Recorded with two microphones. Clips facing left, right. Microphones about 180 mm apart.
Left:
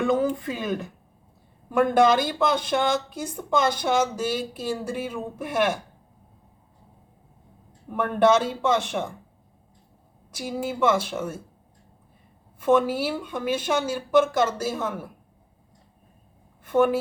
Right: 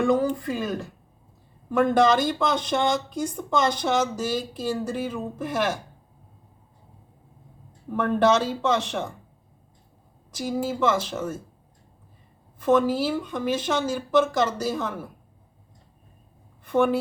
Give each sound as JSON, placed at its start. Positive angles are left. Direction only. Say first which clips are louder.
{"t": 0.2, "sound": "speech", "louder": "even", "side_deg": 20}
{"t": 1.7, "sound": "speech", "louder": "even", "side_deg": 10}
{"t": 7.9, "sound": "speech", "louder": "left 1 dB", "side_deg": 10}
{"t": 10.7, "sound": "speech", "louder": "left 3 dB", "side_deg": 10}
{"t": 12.5, "sound": "speech", "louder": "even", "side_deg": 10}